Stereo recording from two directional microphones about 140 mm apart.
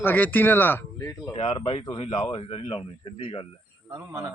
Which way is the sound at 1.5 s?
35° left (ahead or behind).